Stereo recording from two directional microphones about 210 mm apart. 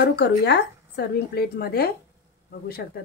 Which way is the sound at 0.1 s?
55° left (ahead or behind).